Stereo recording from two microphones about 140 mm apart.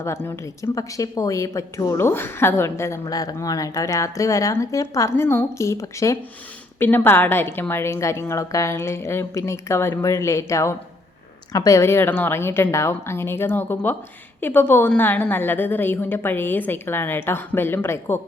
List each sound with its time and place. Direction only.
0.0 s a woman's voice: 20° left (ahead or behind)